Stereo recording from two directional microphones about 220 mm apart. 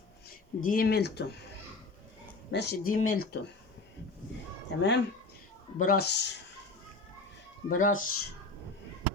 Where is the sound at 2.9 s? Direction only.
40° left (ahead or behind).